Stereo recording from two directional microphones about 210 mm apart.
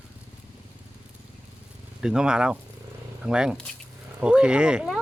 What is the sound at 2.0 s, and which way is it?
Speech, 5° right (ahead or behind).